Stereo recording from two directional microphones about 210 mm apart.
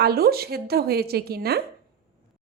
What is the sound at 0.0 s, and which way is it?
A woman's voice, 45° right (ahead or behind).